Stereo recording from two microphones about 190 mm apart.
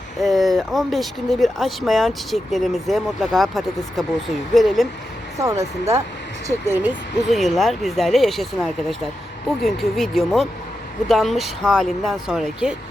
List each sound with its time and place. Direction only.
0.2 s speech: centre (ahead or behind)
5.4 s speech: 15° right (ahead or behind)
7.3 s speech: centre (ahead or behind)